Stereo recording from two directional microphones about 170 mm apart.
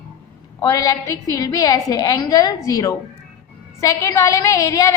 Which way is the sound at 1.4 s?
20° left (ahead or behind).